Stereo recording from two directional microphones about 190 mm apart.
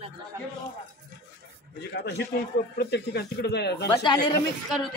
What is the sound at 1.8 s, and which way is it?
Speech, 60° left (ahead or behind).